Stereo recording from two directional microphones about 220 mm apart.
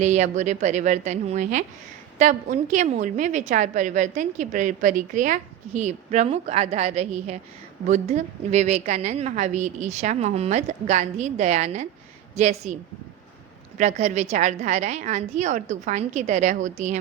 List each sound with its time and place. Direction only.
0.0 s a woman's voice: 30° right (ahead or behind)
13.7 s a woman's voice: 30° right (ahead or behind)